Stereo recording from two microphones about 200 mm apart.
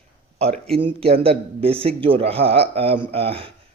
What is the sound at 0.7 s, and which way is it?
Speech, 25° right (ahead or behind).